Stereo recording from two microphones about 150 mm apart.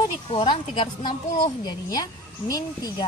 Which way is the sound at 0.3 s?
35° left (ahead or behind).